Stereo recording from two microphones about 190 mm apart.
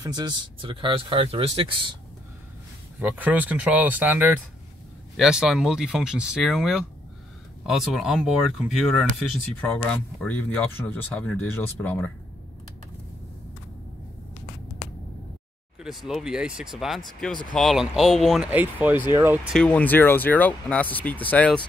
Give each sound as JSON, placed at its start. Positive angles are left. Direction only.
{"t": 0.0, "sound": "speech", "side_deg": -20}
{"t": 3.0, "sound": "speech", "side_deg": -10}
{"t": 15.8, "sound": "speech", "side_deg": 0}
{"t": 19.5, "sound": "speech", "side_deg": 5}